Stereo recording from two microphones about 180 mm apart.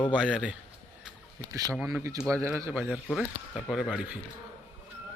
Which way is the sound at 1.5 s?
20° right (ahead or behind).